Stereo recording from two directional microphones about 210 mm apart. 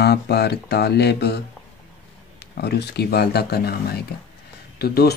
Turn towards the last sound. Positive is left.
turn(degrees=50)  # may be behind; listen again after turning